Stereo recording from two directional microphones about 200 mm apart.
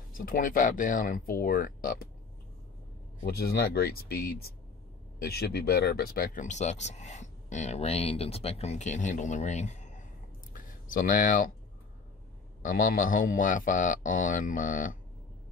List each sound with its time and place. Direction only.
0.1 s speech: 45° left (ahead or behind)
3.3 s speech: 50° left (ahead or behind); by 10.0 s 35° left (ahead or behind)
10.5 s a sound: 40° left (ahead or behind)
12.6 s speech: 45° left (ahead or behind)